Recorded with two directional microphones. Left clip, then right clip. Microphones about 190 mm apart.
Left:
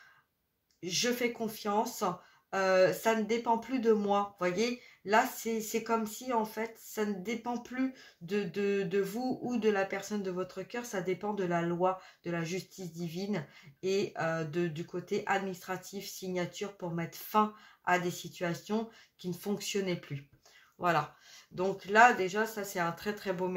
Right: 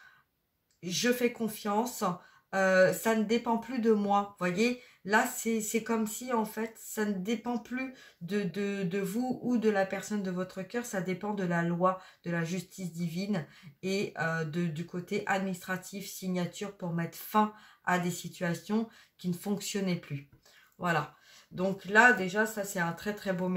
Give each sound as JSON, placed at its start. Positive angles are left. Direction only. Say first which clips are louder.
{"t": 0.8, "sound": "speech", "louder": "right 2 dB", "side_deg": 25}
{"t": 13.9, "sound": "speech", "louder": "right 1 dB", "side_deg": 25}
{"t": 20.8, "sound": "speech", "louder": "left 1 dB", "side_deg": 35}